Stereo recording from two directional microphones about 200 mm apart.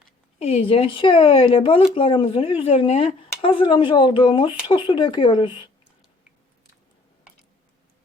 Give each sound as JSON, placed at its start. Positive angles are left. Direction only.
{"t": 0.3, "sound": "speech", "side_deg": 30}